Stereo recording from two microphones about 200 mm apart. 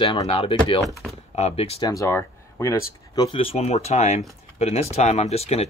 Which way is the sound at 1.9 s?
15° left (ahead or behind).